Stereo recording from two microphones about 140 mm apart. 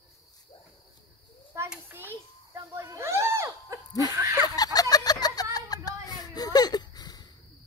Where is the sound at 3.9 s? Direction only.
30° left (ahead or behind).